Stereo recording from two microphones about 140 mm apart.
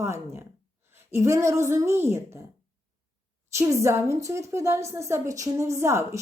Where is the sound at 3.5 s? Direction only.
20° right (ahead or behind).